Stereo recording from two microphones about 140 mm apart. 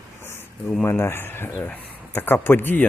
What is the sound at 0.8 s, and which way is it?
Speech, 20° left (ahead or behind).